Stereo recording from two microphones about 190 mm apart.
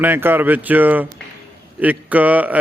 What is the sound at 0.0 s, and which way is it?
Speech, 10° right (ahead or behind).